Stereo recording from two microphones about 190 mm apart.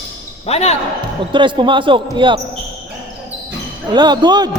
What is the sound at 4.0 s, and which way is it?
Speech, 25° right (ahead or behind).